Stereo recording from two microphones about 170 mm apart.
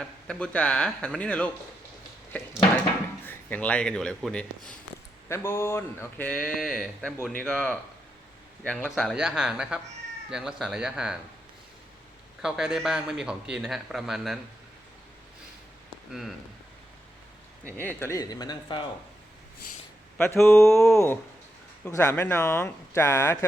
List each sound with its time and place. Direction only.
0.0 s speech: 5° left (ahead or behind)
3.2 s speech: 10° left (ahead or behind)
5.3 s speech: 15° left (ahead or behind); by 11.2 s 5° right (ahead or behind)
12.4 s speech: 5° right (ahead or behind)
17.7 s speech: 15° left (ahead or behind)
20.1 s speech: 15° left (ahead or behind)
20.4 s speech: centre (ahead or behind)
20.9 s speech: 15° left (ahead or behind)